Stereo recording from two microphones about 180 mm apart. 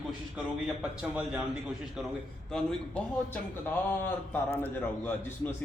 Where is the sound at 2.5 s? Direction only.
5° left (ahead or behind).